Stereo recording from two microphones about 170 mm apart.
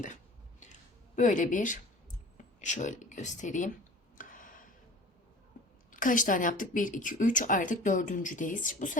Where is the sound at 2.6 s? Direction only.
45° left (ahead or behind).